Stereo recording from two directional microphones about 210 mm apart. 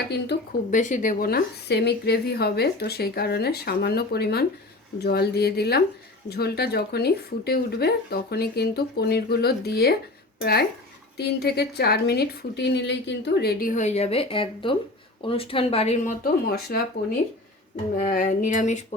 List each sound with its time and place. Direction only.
0.3 s a woman's voice: 55° left (ahead or behind)
0.7 s a woman's voice: 35° left (ahead or behind)
16.2 s a woman's voice: 45° left (ahead or behind)
18.0 s a sound: 40° left (ahead or behind)